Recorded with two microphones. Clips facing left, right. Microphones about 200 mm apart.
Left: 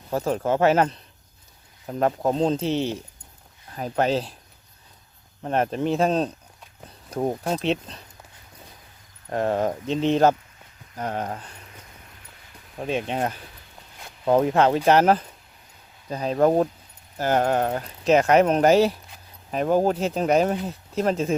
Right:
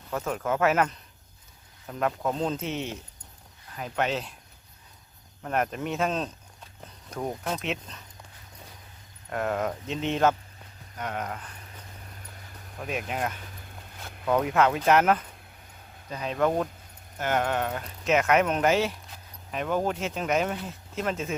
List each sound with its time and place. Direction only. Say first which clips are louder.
0.1 s speech: left 6 dB; 35° left (ahead or behind)
5.4 s speech: left 5 dB; 30° left (ahead or behind)
9.3 s speech: left 5 dB; 30° left (ahead or behind)
12.8 s speech: left 5 dB; 30° left (ahead or behind)